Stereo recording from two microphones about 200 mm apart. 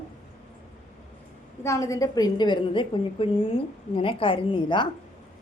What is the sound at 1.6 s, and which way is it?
A woman's voice, 15° left (ahead or behind).